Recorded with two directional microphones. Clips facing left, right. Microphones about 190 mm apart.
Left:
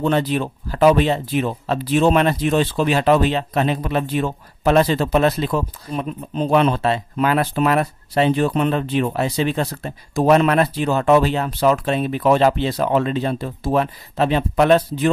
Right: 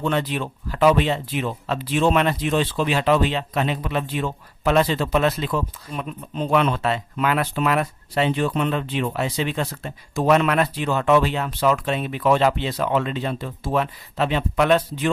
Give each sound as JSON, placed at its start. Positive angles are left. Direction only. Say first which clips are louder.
{"t": 0.0, "sound": "speech", "louder": "left 4 dB", "side_deg": 35}